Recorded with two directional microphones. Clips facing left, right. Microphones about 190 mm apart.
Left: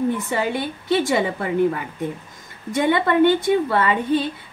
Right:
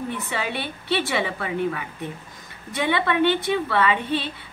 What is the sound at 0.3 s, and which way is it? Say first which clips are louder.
A woman's voice: left 5 dB; 45° left (ahead or behind).